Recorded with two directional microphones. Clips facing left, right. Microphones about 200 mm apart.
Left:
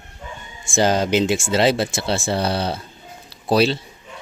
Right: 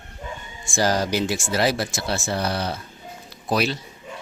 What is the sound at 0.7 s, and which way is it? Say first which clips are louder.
Speech: left 4 dB; 25° left (ahead or behind).